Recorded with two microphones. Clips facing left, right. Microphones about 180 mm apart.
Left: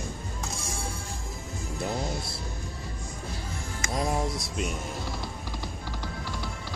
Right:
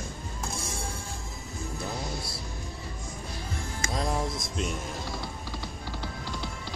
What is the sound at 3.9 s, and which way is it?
Music, 10° left (ahead or behind).